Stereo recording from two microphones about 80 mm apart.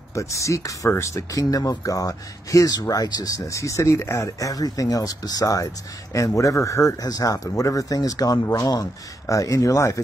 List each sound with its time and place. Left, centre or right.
0.1 s a man's voice: left
7.1 s speech: left